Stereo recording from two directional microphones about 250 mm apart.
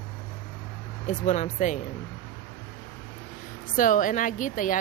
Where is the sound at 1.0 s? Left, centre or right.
Left.